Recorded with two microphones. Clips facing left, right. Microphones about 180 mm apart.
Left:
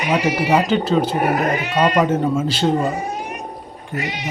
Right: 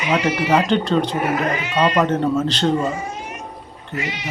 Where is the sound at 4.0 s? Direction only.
45° left (ahead or behind).